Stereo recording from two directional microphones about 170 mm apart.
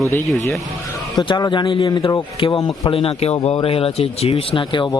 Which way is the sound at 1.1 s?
25° left (ahead or behind).